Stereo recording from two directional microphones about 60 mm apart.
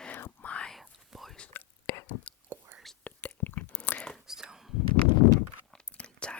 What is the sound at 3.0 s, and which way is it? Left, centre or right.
Whispering, left.